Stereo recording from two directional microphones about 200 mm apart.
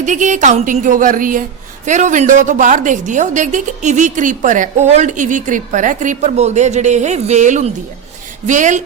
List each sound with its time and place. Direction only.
0.0 s a woman's voice: 35° right (ahead or behind)